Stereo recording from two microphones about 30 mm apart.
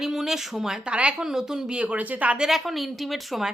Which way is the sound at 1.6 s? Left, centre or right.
Right.